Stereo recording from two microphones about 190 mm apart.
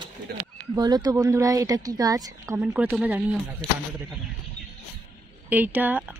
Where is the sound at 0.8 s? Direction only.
20° right (ahead or behind).